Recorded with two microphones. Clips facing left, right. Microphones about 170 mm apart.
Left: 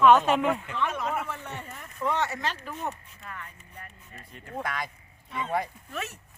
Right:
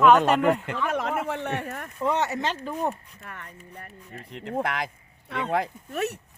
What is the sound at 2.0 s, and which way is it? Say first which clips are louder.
Speech: right 3 dB; 20° right (ahead or behind).